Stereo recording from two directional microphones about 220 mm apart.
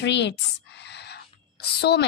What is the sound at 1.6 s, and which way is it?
Speech, 50° left (ahead or behind).